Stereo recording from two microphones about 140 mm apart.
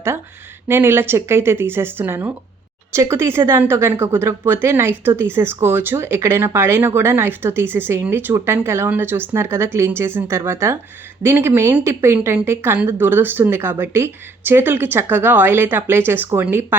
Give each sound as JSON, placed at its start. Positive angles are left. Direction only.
{"t": 0.7, "sound": "speech", "side_deg": -15}